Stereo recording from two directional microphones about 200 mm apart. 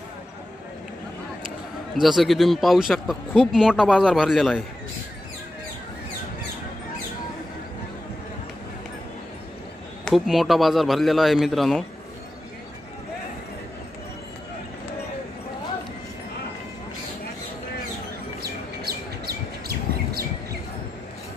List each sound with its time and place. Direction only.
2.0 s speech: centre (ahead or behind)
10.0 s speech: centre (ahead or behind)
18.4 s chirp: 50° right (ahead or behind)